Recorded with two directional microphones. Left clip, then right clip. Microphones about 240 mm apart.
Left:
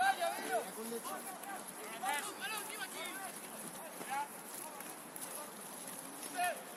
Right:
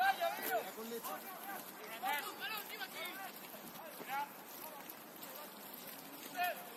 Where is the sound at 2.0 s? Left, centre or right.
Centre.